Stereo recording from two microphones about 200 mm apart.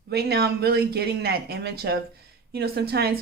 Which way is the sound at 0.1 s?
50° right (ahead or behind).